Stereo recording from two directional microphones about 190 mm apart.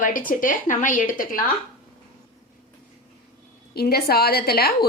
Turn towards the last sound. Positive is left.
turn(degrees=55)  # may be behind; listen again after turning